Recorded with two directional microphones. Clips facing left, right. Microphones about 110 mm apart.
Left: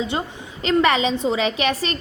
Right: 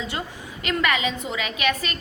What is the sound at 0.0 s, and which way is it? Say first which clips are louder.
A woman's voice: left 6 dB; 25° left (ahead or behind).